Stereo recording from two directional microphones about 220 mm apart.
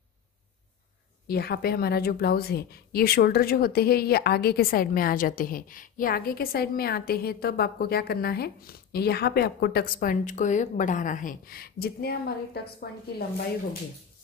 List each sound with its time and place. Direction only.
1.2 s a woman's voice: 45° left (ahead or behind)